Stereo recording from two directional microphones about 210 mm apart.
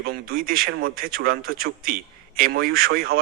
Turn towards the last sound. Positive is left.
turn(degrees=-45)  # may be behind; listen again after turning